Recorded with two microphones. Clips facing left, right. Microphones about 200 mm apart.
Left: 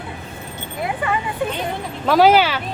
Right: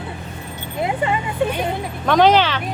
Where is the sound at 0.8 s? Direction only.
25° right (ahead or behind).